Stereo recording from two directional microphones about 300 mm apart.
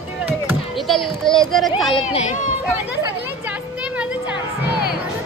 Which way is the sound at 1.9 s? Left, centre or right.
Centre.